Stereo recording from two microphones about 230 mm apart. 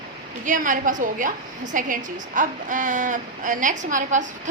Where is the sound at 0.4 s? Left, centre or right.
Right.